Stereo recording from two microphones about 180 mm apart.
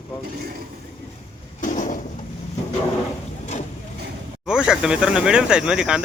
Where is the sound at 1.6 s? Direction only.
45° left (ahead or behind).